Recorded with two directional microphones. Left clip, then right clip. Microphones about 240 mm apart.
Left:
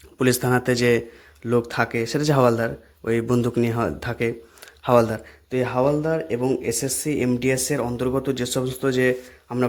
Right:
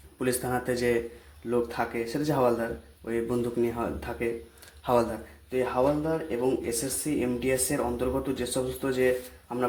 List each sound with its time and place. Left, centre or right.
0.2 s speech: left
4.8 s speech: left
5.5 s speech: left